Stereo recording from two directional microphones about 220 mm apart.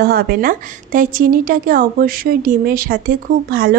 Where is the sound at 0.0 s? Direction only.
45° right (ahead or behind).